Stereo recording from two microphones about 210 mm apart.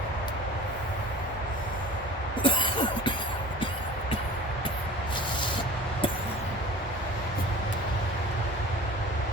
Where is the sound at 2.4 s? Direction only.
25° left (ahead or behind).